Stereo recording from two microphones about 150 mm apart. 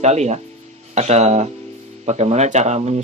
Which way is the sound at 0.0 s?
50° right (ahead or behind).